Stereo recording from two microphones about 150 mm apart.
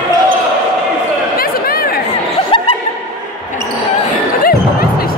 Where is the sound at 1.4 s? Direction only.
80° left.